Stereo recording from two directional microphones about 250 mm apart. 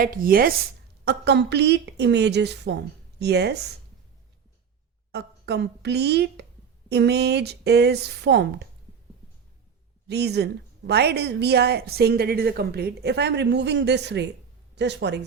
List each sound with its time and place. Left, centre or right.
0.0 s a woman's voice: right
5.1 s a woman's voice: right
10.1 s a woman's voice: right